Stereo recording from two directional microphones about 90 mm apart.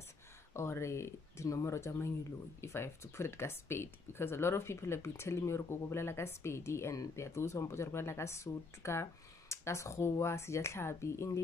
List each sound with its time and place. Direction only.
0.6 s speech: 30° left (ahead or behind)